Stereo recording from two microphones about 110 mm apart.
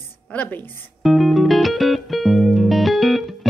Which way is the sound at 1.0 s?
Centre (ahead or behind).